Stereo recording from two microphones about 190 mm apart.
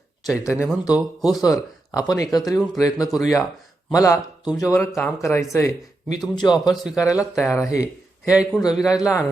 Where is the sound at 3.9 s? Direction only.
20° left (ahead or behind).